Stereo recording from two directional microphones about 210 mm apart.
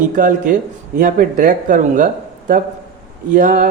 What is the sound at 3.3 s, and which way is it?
Speech, 40° right (ahead or behind).